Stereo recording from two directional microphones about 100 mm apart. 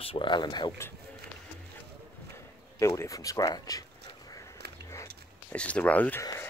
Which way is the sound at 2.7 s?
30° left (ahead or behind).